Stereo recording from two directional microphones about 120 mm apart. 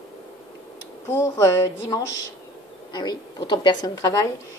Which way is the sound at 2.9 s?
40° left (ahead or behind).